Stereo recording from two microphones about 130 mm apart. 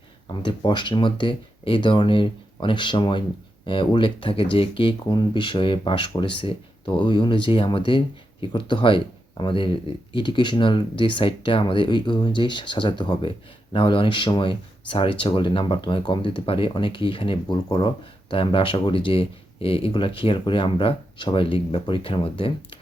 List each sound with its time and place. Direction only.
0.3 s speech: 35° left (ahead or behind)